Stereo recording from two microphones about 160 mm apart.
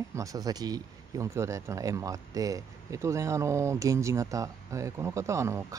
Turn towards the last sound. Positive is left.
turn(degrees=-20)  # may be behind; listen again after turning